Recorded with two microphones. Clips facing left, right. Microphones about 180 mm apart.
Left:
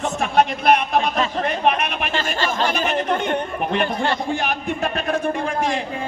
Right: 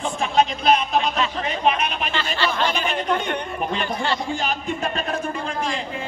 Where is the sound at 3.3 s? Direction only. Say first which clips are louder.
Left 4 dB; 55° left (ahead or behind).